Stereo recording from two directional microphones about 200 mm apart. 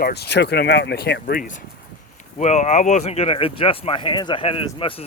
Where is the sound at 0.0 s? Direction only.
55° left (ahead or behind).